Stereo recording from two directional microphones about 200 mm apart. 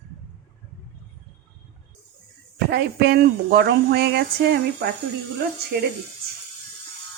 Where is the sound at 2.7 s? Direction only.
55° right (ahead or behind).